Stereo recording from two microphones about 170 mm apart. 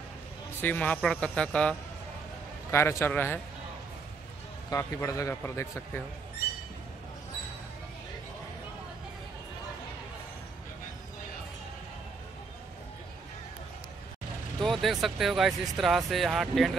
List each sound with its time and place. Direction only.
0.6 s a man's voice: 10° left (ahead or behind)
4.6 s a man's voice: 20° left (ahead or behind)
14.6 s speech: centre (ahead or behind)